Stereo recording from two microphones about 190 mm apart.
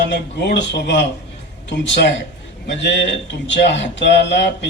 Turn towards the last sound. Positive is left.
turn(degrees=65)  # may be behind; listen again after turning